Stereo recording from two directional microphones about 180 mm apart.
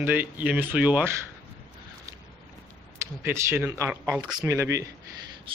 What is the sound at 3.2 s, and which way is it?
Speech, 10° right (ahead or behind).